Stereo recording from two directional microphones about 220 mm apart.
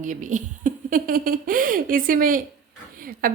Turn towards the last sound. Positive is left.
turn(degrees=-40)  # may be behind; listen again after turning